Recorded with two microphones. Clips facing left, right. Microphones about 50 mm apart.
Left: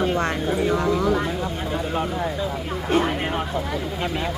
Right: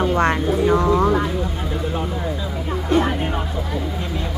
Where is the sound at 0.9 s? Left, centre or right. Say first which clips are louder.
Right 4 dB; right.